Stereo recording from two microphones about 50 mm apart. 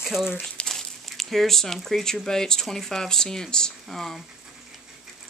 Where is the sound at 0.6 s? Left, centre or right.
Centre.